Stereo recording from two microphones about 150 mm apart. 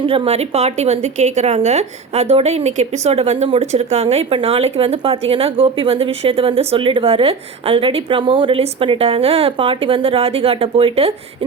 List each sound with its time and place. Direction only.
0.1 s speech: 45° right (ahead or behind)